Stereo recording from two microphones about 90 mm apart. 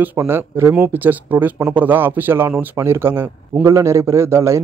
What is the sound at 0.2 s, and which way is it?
Speech, 25° right (ahead or behind).